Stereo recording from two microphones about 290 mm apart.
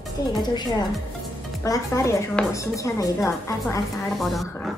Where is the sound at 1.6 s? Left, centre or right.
Centre.